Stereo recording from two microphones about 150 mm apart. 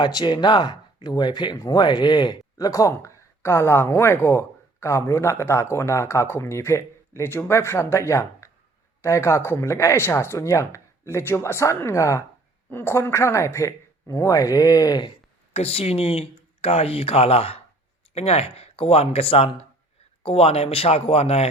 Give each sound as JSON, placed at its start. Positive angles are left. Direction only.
{"t": 0.0, "sound": "speech", "side_deg": 30}
{"t": 15.5, "sound": "speech", "side_deg": 45}